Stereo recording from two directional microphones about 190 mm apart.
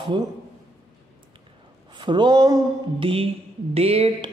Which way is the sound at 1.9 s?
25° right (ahead or behind).